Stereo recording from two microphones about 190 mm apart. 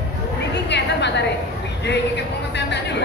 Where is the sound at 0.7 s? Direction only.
65° left (ahead or behind).